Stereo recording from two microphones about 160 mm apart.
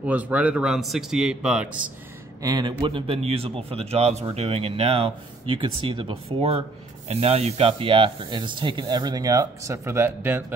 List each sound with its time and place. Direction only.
0.0 s a man's voice: 10° right (ahead or behind)
2.4 s a man's voice: 25° right (ahead or behind)